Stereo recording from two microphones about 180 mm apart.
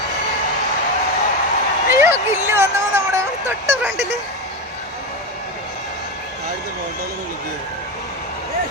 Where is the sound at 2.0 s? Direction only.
15° right (ahead or behind).